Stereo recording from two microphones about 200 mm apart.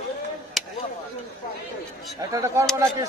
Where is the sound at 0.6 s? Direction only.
Centre (ahead or behind).